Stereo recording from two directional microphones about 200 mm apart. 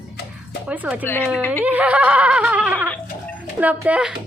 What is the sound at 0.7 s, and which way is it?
Speech, 5° right (ahead or behind).